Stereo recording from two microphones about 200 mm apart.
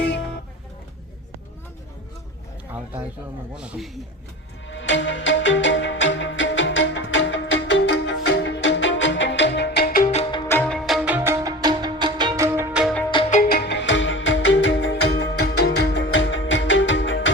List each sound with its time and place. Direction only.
3.5 s a man's voice: 5° right (ahead or behind)
4.7 s music: 65° left (ahead or behind); by 10.2 s 40° left (ahead or behind)
10.3 s music: 15° left (ahead or behind)
13.3 s music: 45° left (ahead or behind)
13.7 s music: 65° left (ahead or behind)